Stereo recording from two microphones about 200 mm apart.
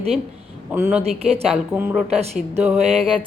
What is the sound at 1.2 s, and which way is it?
Speech, 30° right (ahead or behind).